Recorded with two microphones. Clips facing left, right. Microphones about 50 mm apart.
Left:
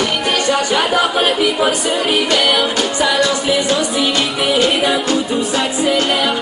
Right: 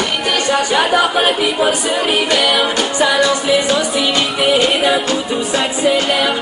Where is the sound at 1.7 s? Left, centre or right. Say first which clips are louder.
Even; right.